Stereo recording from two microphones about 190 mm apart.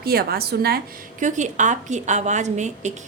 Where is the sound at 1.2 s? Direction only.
40° right (ahead or behind).